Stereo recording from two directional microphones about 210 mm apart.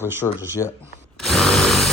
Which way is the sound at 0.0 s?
10° right (ahead or behind).